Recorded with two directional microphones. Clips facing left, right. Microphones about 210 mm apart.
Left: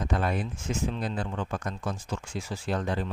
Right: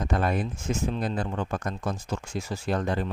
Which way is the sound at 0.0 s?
45° right (ahead or behind).